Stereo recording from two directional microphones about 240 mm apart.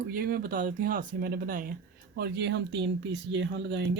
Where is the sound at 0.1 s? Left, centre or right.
Right.